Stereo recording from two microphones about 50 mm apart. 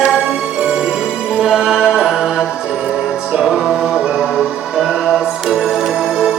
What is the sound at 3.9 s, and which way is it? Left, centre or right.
Music, centre.